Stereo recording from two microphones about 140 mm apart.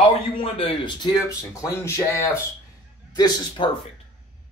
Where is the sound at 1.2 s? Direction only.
20° left (ahead or behind).